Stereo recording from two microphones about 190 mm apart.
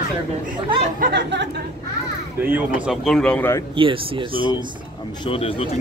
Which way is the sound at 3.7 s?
25° right (ahead or behind).